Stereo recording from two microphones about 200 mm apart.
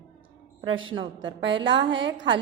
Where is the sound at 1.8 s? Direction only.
65° right (ahead or behind).